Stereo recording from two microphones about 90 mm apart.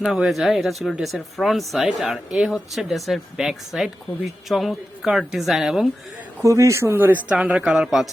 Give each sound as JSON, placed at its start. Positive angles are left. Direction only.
{"t": 0.2, "sound": "speech", "side_deg": 0}
{"t": 6.4, "sound": "speech", "side_deg": -35}